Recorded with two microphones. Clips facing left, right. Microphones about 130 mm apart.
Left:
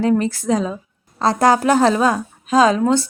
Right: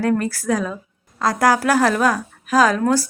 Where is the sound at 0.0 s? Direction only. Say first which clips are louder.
Left 3 dB; 20° left (ahead or behind).